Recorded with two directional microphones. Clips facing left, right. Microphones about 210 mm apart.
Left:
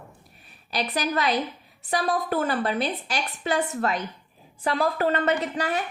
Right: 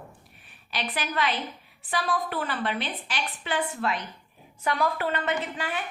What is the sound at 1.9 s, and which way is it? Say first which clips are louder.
A woman's voice: left 4 dB; 40° left (ahead or behind).